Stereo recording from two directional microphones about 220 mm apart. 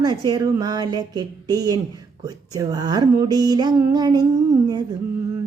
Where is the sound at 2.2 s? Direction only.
15° right (ahead or behind).